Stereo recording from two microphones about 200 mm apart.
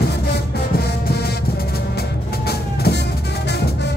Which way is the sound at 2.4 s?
50° left (ahead or behind).